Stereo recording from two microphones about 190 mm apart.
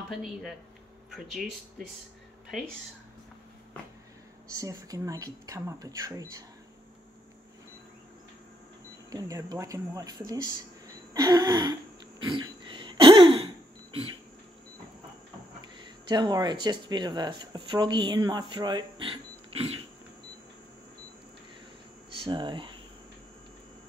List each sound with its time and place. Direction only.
0.1 s speech: centre (ahead or behind)
4.6 s speech: 20° right (ahead or behind)
9.1 s speech: 20° right (ahead or behind)
11.1 s a sound: 20° right (ahead or behind)
16.1 s speech: 25° right (ahead or behind)
22.2 s speech: 25° right (ahead or behind)